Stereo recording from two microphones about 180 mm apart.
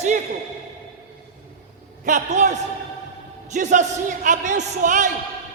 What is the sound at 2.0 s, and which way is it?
A man's voice, 45° right (ahead or behind).